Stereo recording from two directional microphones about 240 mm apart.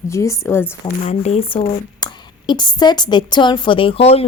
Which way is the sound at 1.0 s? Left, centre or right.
Left.